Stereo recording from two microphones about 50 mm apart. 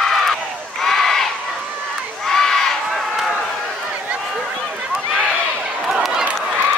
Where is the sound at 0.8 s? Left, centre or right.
Centre.